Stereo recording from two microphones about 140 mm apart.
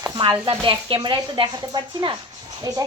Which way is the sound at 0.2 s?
35° right (ahead or behind).